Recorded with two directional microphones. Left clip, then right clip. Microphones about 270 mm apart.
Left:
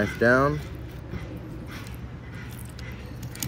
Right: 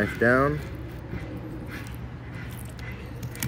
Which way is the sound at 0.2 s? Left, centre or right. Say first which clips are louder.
Left 1 dB; centre.